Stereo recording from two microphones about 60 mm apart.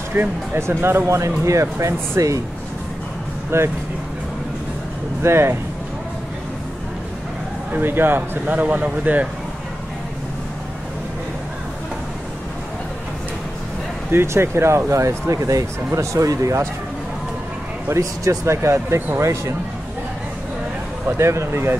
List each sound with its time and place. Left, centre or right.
0.2 s speech: right
3.5 s speech: right
5.2 s speech: right
7.7 s speech: right
14.1 s speech: right
17.8 s speech: right
21.2 s speech: right